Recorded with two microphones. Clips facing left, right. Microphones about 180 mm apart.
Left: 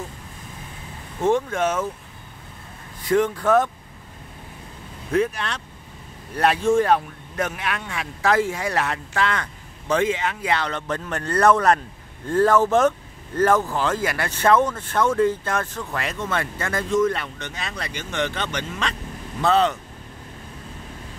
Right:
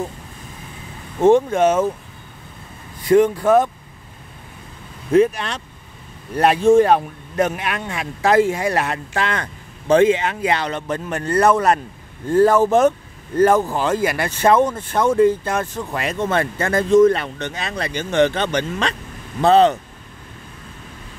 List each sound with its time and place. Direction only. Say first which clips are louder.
1.2 s speech: right 7 dB; 20° right (ahead or behind)
3.1 s speech: right 5 dB; 15° right (ahead or behind)
5.1 s speech: right 7 dB; 20° right (ahead or behind)